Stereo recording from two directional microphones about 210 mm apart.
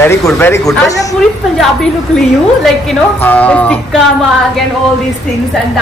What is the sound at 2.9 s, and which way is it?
A man's voice, 5° left (ahead or behind).